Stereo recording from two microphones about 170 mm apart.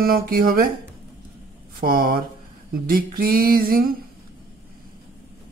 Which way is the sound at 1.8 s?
60° right (ahead or behind).